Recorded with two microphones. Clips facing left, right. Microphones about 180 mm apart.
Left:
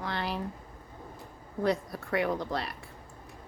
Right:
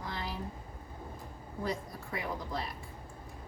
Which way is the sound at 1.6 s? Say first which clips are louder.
Left 8 dB; 70° left (ahead or behind).